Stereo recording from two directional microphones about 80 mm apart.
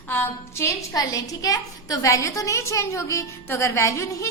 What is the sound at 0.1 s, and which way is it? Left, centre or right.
Speech, left.